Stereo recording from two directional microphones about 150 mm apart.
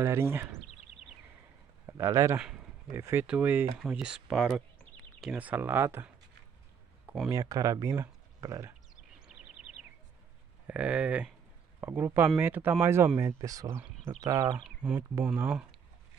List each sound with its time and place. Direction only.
0.0 s speech: 15° right (ahead or behind)
1.9 s speech: 20° right (ahead or behind)
2.3 s speech: 5° right (ahead or behind)
2.9 s speech: 15° right (ahead or behind)
7.2 s speech: 20° right (ahead or behind)
10.7 s speech: 10° right (ahead or behind)
14.6 s speech: 5° right (ahead or behind)